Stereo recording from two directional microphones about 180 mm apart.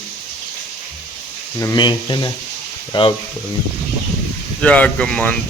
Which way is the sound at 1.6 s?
20° left (ahead or behind).